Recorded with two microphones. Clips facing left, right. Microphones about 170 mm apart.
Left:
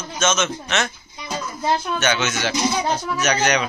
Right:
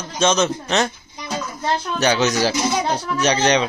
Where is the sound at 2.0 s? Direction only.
35° right (ahead or behind).